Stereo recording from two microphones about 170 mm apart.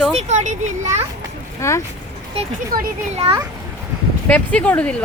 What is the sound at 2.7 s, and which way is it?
Speech, 55° right (ahead or behind).